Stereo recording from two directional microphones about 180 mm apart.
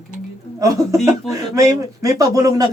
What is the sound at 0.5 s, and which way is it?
A woman's voice, 20° right (ahead or behind).